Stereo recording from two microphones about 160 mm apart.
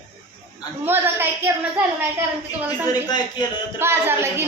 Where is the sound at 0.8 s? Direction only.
15° right (ahead or behind).